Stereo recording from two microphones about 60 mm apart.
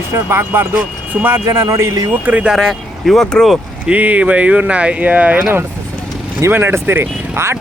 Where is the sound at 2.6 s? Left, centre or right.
Centre.